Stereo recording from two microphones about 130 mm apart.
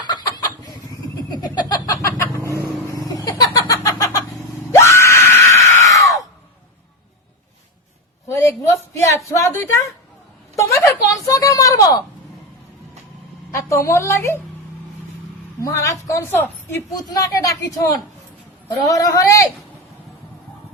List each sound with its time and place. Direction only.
0.1 s a sound: 30° left (ahead or behind)
3.1 s laughter: 25° left (ahead or behind)
4.7 s screaming: 20° left (ahead or behind)
8.3 s a sound: 20° left (ahead or behind)
13.5 s a man's voice: 20° left (ahead or behind)
15.6 s a man's voice: 25° left (ahead or behind)
18.9 s a man's voice: 25° left (ahead or behind)